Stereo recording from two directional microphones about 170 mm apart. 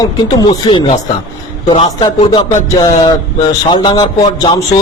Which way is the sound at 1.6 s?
30° left (ahead or behind).